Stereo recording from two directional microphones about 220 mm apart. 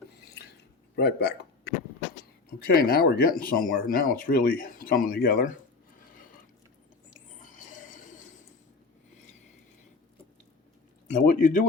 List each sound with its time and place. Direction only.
0.9 s speech: 45° left (ahead or behind)
7.4 s a sound: 35° left (ahead or behind)
11.2 s speech: 40° left (ahead or behind)